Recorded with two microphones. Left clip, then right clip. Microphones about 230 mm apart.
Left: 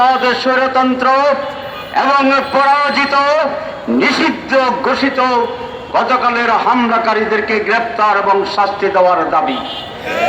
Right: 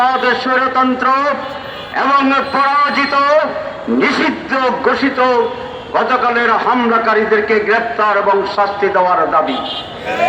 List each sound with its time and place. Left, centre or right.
0.0 s a man's voice: left